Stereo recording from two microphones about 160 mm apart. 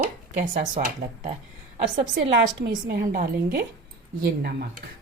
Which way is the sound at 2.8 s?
65° right (ahead or behind).